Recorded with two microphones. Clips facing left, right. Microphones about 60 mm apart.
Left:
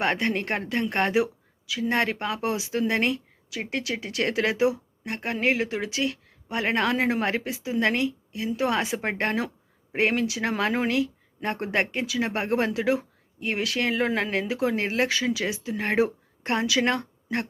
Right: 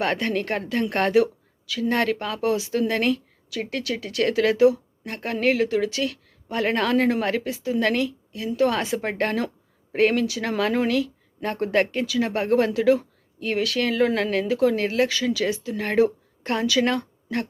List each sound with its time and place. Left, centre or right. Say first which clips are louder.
0.0 s speech: right 1 dB; centre
0.9 s speech: right 4 dB; centre